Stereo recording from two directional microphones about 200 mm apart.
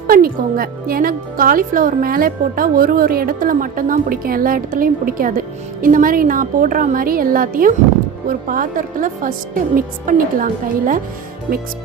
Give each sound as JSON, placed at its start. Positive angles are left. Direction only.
{"t": 0.1, "sound": "a woman's voice", "side_deg": -45}